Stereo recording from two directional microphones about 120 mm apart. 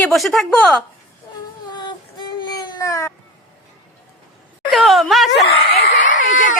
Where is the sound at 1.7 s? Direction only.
40° left (ahead or behind).